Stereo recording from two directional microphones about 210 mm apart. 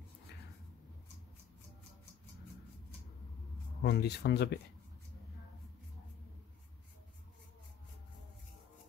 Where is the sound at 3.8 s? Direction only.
55° left (ahead or behind).